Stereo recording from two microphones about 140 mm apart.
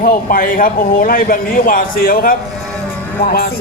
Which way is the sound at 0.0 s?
90° left.